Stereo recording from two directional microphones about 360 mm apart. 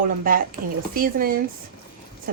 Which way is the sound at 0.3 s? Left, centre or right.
Right.